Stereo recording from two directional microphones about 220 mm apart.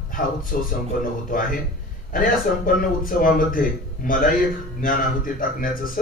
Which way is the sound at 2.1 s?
40° left (ahead or behind).